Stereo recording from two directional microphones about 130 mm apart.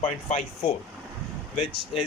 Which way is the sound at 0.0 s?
60° left (ahead or behind).